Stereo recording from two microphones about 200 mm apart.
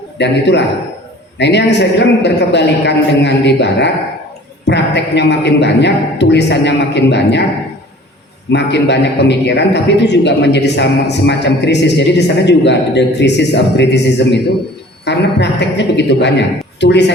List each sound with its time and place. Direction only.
0.2 s a man's voice: 60° left (ahead or behind)
8.4 s a man's voice: 60° left (ahead or behind)